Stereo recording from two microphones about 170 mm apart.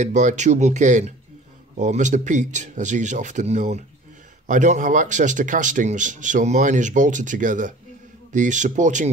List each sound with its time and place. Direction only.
0.0 s speech: 45° right (ahead or behind)